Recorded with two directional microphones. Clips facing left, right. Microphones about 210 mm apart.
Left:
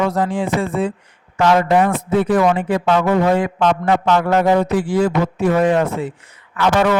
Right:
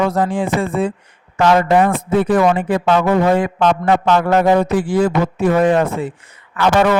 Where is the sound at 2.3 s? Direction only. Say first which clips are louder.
Right 1 dB; 55° right (ahead or behind).